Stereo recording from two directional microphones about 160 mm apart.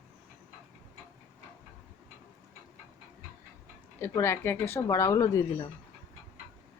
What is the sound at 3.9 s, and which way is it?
Speech, 15° left (ahead or behind).